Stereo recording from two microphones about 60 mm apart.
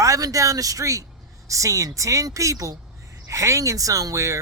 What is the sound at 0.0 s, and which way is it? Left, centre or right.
Speech, right.